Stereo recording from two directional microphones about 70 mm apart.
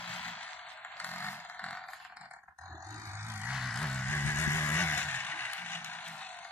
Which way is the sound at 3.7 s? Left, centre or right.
Centre.